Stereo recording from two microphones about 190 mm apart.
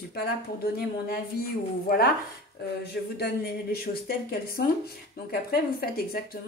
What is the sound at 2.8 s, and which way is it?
Speech, 55° left (ahead or behind).